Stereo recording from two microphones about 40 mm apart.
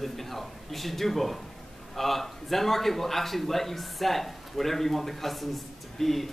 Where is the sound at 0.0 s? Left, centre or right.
Centre.